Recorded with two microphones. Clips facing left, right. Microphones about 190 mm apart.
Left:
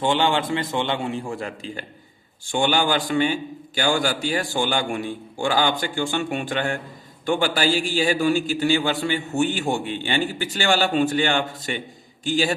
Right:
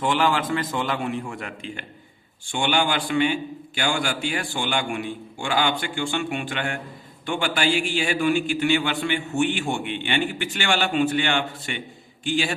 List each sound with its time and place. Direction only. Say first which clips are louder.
0.0 s a man's voice: left 1 dB; 25° left (ahead or behind)